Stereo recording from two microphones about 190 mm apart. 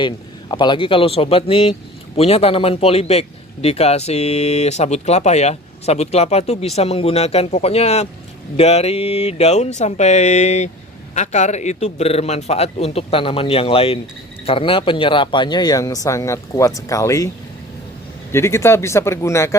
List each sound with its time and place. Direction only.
0.0 s speech: 25° left (ahead or behind)
18.3 s speech: 15° left (ahead or behind)